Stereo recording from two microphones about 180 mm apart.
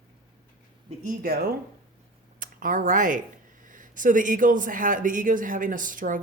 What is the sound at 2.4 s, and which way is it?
A man's voice, 50° right (ahead or behind).